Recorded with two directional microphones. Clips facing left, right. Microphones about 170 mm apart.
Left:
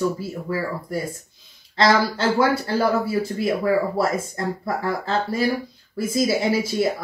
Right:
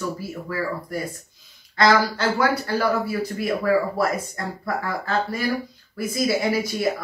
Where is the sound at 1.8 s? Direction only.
25° left (ahead or behind).